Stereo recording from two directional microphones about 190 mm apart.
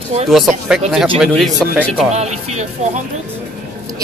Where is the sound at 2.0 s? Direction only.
35° right (ahead or behind).